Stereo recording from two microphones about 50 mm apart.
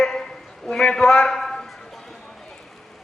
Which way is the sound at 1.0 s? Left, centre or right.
Centre.